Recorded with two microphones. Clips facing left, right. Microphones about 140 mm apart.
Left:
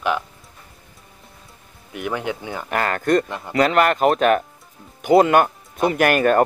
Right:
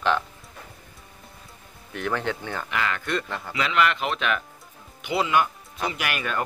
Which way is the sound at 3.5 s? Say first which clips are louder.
Left 7 dB; 45° left (ahead or behind).